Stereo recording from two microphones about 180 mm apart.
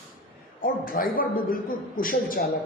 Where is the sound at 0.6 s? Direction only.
50° left (ahead or behind).